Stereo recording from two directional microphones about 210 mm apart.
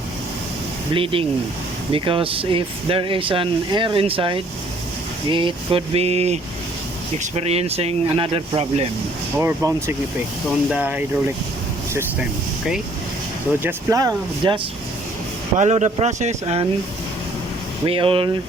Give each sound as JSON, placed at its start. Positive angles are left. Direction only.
{"t": 0.9, "sound": "speech", "side_deg": -25}
{"t": 9.4, "sound": "speech", "side_deg": -15}
{"t": 13.6, "sound": "speech", "side_deg": -10}
{"t": 15.5, "sound": "speech", "side_deg": -35}
{"t": 17.8, "sound": "speech", "side_deg": -25}